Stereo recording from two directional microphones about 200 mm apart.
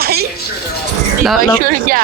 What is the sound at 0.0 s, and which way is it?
Music, 50° right (ahead or behind).